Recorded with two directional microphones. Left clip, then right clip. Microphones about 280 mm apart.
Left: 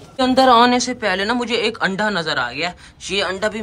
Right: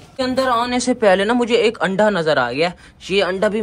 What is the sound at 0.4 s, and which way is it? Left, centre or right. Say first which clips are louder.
Speech: left 6 dB; left.